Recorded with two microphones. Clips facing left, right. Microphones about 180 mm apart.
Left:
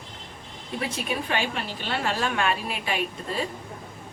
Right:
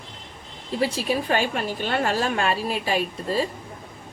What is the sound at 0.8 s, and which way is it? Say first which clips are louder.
A woman's voice: right 6 dB; 35° right (ahead or behind).